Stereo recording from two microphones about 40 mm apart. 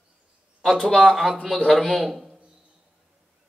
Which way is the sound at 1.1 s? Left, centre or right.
Centre.